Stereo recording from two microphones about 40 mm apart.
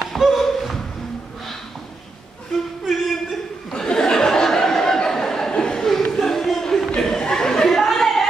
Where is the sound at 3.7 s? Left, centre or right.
Centre.